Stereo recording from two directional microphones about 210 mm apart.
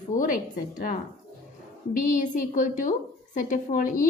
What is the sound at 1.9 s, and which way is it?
A woman's voice, 40° left (ahead or behind).